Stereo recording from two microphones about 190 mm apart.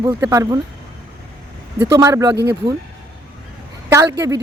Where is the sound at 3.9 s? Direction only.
15° right (ahead or behind).